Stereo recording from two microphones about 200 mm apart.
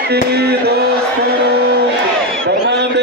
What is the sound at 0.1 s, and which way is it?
Music, 55° right (ahead or behind).